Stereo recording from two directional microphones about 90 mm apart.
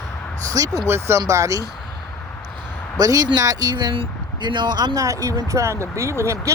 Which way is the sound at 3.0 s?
45° right (ahead or behind).